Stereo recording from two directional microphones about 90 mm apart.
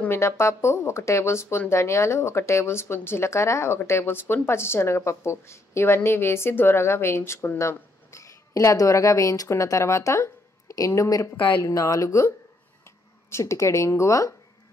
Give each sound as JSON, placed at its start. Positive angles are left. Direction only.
{"t": 0.1, "sound": "a woman's voice", "side_deg": 30}